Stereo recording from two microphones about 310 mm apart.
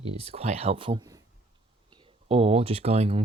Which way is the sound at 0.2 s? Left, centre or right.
Centre.